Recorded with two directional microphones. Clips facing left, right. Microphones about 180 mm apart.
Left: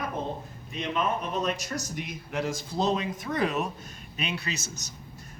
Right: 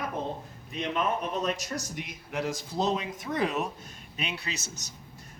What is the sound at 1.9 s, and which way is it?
Speech, 15° right (ahead or behind).